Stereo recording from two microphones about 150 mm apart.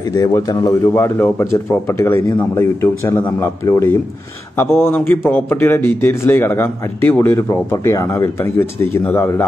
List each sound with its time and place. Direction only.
0.1 s speech: 25° left (ahead or behind)